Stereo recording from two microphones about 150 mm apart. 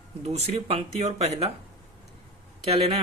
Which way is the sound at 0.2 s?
45° right (ahead or behind).